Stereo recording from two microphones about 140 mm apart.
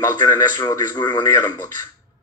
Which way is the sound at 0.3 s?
20° left (ahead or behind).